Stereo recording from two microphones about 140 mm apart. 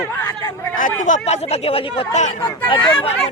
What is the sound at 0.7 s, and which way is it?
Speech, 70° left (ahead or behind).